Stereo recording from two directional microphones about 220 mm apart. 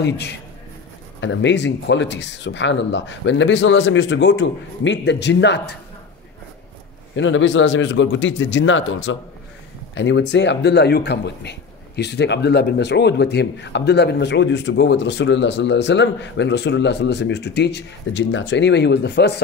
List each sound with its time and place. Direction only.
1.2 s speech: 55° left (ahead or behind)
7.2 s speech: 60° left (ahead or behind)